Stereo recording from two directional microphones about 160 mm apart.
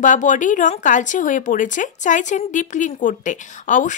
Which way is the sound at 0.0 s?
50° left (ahead or behind).